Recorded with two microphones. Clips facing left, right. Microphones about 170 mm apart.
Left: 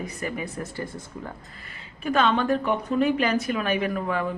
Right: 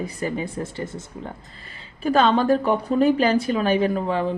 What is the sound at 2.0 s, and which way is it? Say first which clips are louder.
Speech: right 4 dB; 35° right (ahead or behind).